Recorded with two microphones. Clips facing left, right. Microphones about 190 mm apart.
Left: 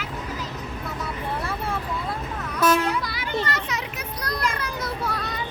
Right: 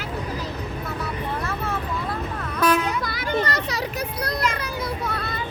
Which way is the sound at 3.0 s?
45° right (ahead or behind).